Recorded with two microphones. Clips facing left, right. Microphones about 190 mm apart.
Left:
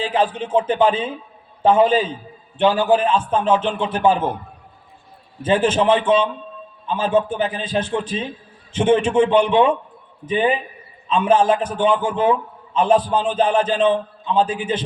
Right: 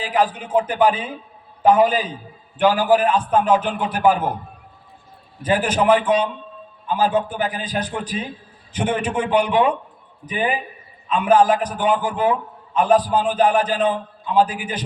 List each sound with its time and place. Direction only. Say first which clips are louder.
0.0 s a man's voice: left 1 dB; 25° left (ahead or behind)
5.4 s a man's voice: left 2 dB; 25° left (ahead or behind)